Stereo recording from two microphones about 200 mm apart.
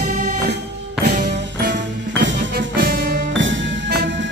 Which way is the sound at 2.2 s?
65° right (ahead or behind).